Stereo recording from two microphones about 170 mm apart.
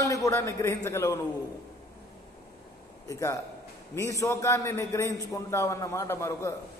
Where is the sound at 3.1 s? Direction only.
15° left (ahead or behind).